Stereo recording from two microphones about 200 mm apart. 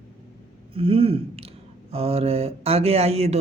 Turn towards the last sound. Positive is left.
turn(degrees=-30)  # may be behind; listen again after turning